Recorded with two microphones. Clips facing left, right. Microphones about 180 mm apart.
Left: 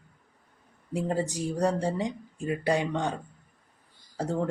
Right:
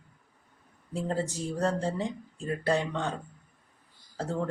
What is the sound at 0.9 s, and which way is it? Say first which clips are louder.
Speech: left 2 dB; 15° left (ahead or behind).